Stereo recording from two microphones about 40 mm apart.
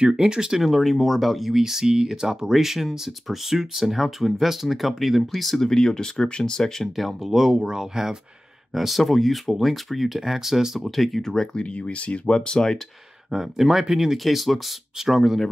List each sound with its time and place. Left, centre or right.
0.0 s speech: centre
0.6 s speech: centre
1.6 s speech: centre
7.0 s speech: centre
8.7 s speech: centre
10.8 s speech: centre
11.5 s speech: left
12.4 s speech: centre
13.3 s speech: centre